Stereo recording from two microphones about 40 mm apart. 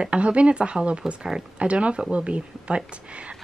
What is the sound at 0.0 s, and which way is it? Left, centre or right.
A woman's voice, right.